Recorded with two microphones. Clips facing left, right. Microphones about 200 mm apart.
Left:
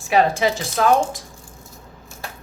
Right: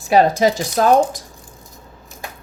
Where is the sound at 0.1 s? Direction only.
40° right (ahead or behind).